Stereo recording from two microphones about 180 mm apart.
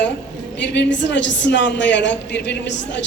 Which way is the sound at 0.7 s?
85° left.